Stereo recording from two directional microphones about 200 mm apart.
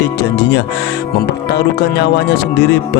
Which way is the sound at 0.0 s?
55° left (ahead or behind).